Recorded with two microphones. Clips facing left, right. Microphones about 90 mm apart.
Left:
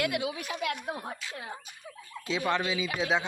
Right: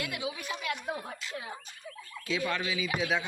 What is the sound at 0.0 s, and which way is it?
Speech, 60° left (ahead or behind).